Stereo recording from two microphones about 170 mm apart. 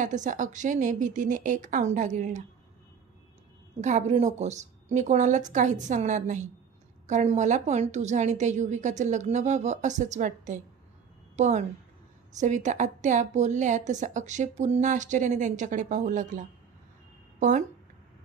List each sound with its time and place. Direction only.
0.0 s a woman's voice: 50° right (ahead or behind)
3.8 s a woman's voice: 40° right (ahead or behind)